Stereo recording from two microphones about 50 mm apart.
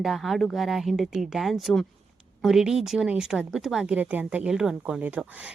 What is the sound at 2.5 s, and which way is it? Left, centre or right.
A woman's voice, centre.